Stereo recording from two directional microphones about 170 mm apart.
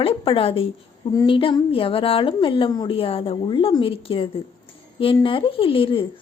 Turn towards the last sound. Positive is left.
turn(degrees=30)  # may be behind; listen again after turning